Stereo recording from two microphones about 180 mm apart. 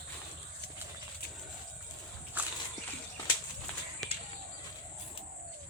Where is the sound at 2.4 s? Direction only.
10° right (ahead or behind).